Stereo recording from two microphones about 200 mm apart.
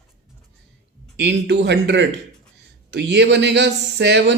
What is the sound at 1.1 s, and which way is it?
Speech, 60° right (ahead or behind).